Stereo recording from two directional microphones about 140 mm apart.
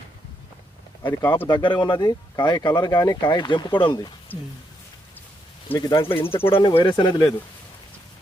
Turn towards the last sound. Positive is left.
turn(degrees=30)  # may be behind; listen again after turning